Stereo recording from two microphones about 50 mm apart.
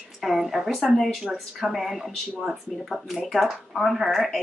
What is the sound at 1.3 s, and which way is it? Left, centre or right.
Speech, centre.